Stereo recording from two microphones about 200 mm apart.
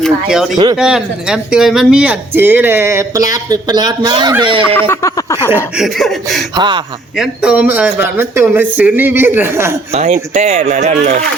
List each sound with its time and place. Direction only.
0.0 s speech: centre (ahead or behind)
0.5 s a man's voice: 20° right (ahead or behind)
0.8 s speech: 5° right (ahead or behind); by 4.6 s 25° right (ahead or behind)
4.7 s speech: 10° left (ahead or behind)
5.5 s speech: 5° right (ahead or behind)
6.6 s a man's voice: 25° right (ahead or behind)
7.2 s speech: 5° right (ahead or behind)
9.9 s speech: 35° right (ahead or behind)